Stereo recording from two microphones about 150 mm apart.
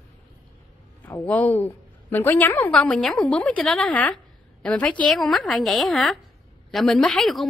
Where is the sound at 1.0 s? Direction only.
10° left (ahead or behind).